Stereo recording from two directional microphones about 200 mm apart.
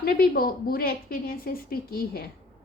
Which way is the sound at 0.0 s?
50° left (ahead or behind).